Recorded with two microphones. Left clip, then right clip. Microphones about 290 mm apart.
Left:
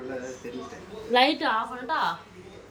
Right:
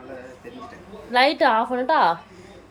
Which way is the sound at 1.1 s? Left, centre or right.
Centre.